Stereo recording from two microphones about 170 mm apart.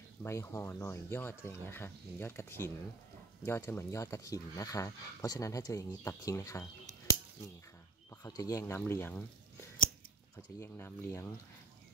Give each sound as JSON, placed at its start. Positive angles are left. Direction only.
{"t": 0.2, "sound": "speech", "side_deg": 15}
{"t": 8.1, "sound": "speech", "side_deg": 20}